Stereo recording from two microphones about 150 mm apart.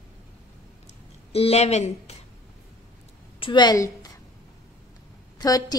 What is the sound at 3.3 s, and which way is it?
Speech, 35° left (ahead or behind).